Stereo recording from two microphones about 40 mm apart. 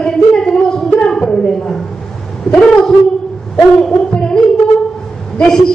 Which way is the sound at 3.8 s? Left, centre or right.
Centre.